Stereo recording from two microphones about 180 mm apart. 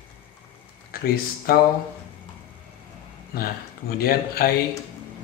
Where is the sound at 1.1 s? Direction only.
55° left (ahead or behind).